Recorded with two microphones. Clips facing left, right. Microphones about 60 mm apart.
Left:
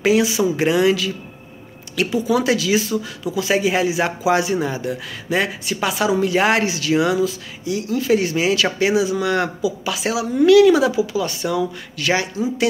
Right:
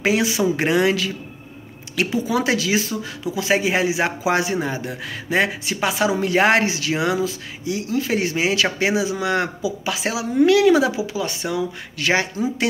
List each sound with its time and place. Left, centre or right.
0.0 s speech: right